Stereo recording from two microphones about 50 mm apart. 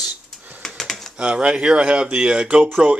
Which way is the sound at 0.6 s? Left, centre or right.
Centre.